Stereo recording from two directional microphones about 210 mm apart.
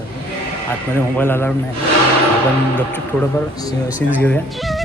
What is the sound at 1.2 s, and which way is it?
Speech, 10° left (ahead or behind).